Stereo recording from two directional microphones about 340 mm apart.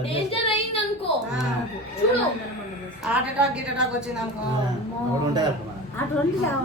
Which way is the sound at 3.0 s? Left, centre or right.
Centre.